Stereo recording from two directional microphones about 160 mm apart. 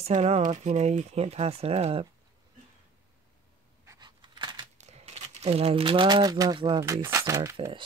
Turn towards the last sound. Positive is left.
turn(degrees=-20)  # may be behind; listen again after turning